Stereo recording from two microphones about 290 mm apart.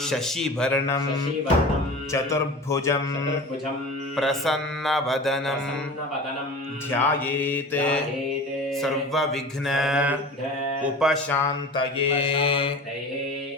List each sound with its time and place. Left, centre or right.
0.0 s mantra: centre
2.1 s mantra: centre
6.9 s mantra: centre